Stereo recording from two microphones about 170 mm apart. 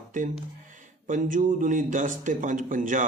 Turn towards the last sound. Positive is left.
turn(degrees=-50)  # may be behind; listen again after turning